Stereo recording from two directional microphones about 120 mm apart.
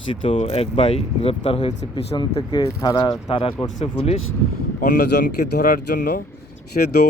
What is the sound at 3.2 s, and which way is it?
Speech, 50° left (ahead or behind).